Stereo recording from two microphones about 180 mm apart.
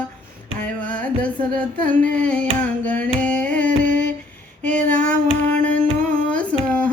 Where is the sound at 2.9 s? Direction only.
5° left (ahead or behind).